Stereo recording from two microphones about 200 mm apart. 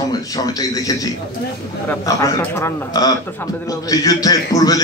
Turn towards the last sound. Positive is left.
turn(degrees=20)  # may be behind; listen again after turning